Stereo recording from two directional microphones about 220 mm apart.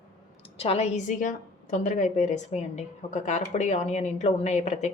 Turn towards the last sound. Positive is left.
turn(degrees=30)  # may be behind; listen again after turning